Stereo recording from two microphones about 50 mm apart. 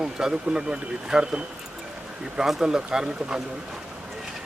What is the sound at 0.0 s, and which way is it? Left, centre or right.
Speech, centre.